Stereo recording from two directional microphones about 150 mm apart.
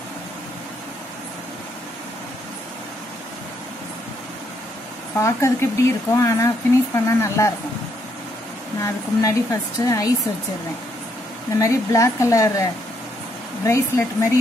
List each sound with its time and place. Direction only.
5.2 s speech: 20° left (ahead or behind)
8.8 s speech: 20° left (ahead or behind)
11.5 s speech: 20° left (ahead or behind)
13.7 s speech: 20° left (ahead or behind)